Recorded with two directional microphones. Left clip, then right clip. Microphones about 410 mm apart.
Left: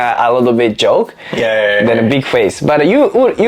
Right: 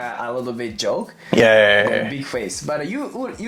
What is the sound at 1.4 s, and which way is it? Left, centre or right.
Speech, right.